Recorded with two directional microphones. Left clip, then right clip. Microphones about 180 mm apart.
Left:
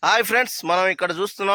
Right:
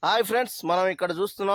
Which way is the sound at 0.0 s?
15° left (ahead or behind).